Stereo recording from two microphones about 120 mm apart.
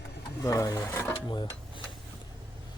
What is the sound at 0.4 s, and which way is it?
Speech, 30° left (ahead or behind).